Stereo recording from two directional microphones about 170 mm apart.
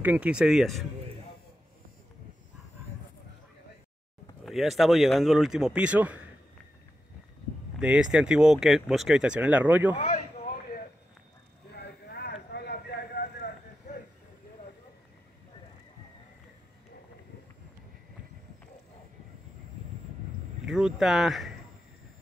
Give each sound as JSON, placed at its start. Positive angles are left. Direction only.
{"t": 0.0, "sound": "speech", "side_deg": -10}
{"t": 4.5, "sound": "speech", "side_deg": 0}
{"t": 7.8, "sound": "speech", "side_deg": -5}
{"t": 9.9, "sound": "a sound", "side_deg": 55}
{"t": 11.7, "sound": "a sound", "side_deg": 75}
{"t": 20.6, "sound": "speech", "side_deg": 0}